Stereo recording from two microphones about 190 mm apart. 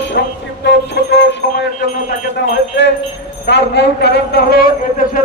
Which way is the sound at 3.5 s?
60° left (ahead or behind).